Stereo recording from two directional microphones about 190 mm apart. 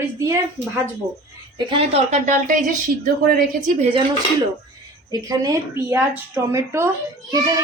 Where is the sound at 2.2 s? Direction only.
45° right (ahead or behind).